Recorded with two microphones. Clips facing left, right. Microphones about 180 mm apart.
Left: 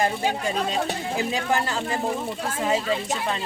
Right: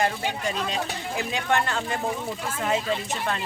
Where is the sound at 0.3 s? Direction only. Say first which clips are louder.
Left 3 dB; 40° left (ahead or behind).